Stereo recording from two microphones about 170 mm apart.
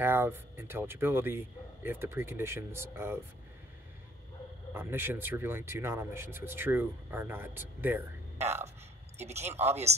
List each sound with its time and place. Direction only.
0.0 s speech: 15° right (ahead or behind)
4.7 s speech: 15° right (ahead or behind)
9.2 s speech: 40° right (ahead or behind)